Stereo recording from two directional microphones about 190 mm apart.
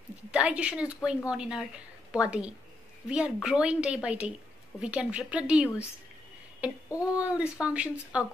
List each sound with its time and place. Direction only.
0.3 s speech: 5° right (ahead or behind)
6.9 s speech: 15° left (ahead or behind)
7.2 s speech: 5° right (ahead or behind)